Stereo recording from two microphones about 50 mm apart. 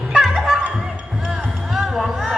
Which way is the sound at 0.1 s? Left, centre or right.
Centre.